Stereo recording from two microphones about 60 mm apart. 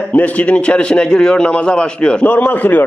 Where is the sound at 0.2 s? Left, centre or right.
Left.